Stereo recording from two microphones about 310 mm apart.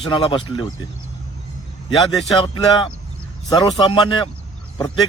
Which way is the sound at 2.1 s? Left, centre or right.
Centre.